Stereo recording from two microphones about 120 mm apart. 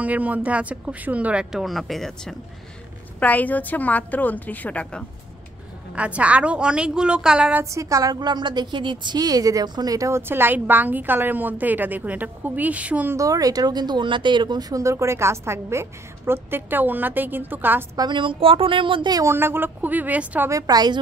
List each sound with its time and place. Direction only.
0.0 s speech: 15° right (ahead or behind)
3.2 s a woman's voice: 15° left (ahead or behind)
5.9 s speech: 10° right (ahead or behind)
7.7 s a woman's voice: 25° right (ahead or behind)
13.1 s a woman's voice: 30° right (ahead or behind)
17.9 s speech: 40° right (ahead or behind)
19.1 s speech: 20° right (ahead or behind)
20.5 s a woman's voice: 35° right (ahead or behind)